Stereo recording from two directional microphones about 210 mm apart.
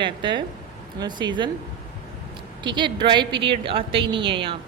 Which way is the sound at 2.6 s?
20° right (ahead or behind).